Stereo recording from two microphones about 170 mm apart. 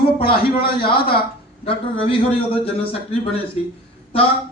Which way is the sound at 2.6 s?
35° left (ahead or behind).